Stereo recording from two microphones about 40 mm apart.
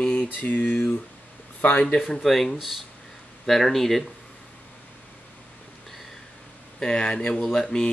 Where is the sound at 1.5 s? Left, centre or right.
Left.